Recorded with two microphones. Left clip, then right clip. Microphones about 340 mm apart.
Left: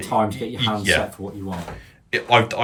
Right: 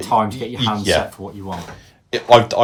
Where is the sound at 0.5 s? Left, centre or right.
Centre.